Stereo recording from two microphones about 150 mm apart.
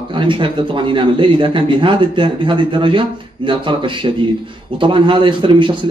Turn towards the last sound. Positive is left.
turn(degrees=-35)  # may be behind; listen again after turning